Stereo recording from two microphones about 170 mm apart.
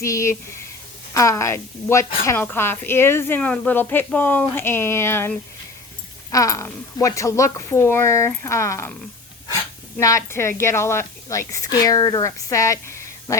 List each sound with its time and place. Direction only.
0.0 s a woman's voice: 15° left (ahead or behind)
10.0 s a woman's voice: 20° left (ahead or behind)